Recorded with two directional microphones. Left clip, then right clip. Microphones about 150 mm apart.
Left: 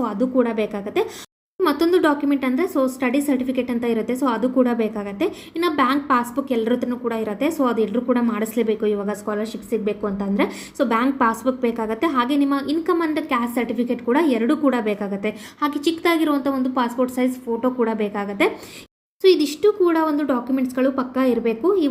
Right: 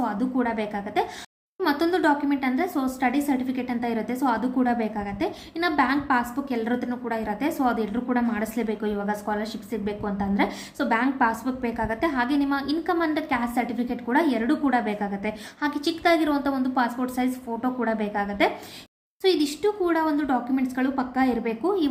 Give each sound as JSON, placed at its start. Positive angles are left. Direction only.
{"t": 0.0, "sound": "speech", "side_deg": 15}